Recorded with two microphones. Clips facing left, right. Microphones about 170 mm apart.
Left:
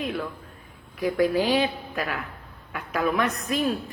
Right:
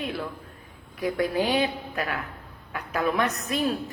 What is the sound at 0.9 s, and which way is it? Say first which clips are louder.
Speech: left 4 dB; 30° left (ahead or behind).